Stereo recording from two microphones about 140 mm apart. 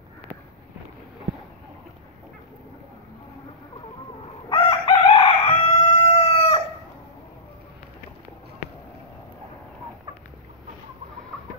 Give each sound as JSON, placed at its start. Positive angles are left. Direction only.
{"t": 4.5, "sound": "chicken", "side_deg": 40}